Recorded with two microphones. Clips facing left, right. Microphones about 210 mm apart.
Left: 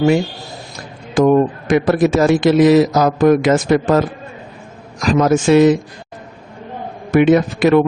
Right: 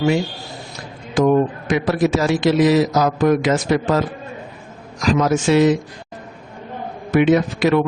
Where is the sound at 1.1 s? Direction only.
50° left (ahead or behind).